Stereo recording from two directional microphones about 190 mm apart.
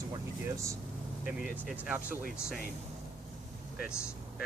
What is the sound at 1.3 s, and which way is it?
Speech, 5° right (ahead or behind).